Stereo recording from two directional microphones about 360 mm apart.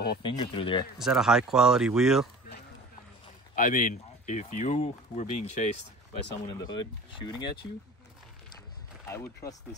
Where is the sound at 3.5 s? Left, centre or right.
Left.